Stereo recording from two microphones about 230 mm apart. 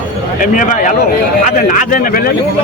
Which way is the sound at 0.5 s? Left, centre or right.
Left.